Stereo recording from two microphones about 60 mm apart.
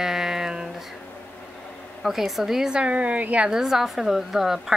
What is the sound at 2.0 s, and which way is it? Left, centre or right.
A woman's voice, centre.